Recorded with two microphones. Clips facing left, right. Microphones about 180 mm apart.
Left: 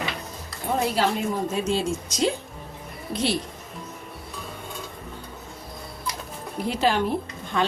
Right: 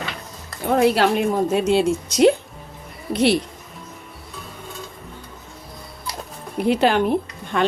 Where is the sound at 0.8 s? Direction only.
70° right (ahead or behind).